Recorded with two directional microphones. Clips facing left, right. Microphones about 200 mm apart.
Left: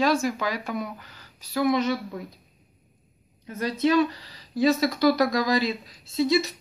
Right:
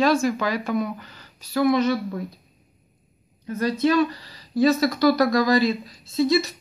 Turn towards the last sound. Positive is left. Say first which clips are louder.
# right 2 dB
turn(degrees=15)  # may be behind; listen again after turning